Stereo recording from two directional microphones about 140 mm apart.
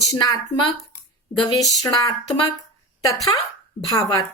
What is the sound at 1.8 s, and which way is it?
Speech, 25° left (ahead or behind).